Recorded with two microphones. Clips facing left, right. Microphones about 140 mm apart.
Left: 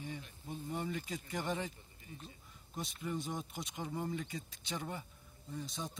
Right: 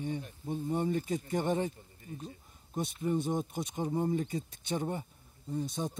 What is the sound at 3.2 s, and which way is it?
Speech, 50° right (ahead or behind).